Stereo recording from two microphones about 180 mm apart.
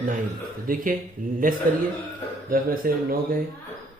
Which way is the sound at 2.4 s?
55° right (ahead or behind).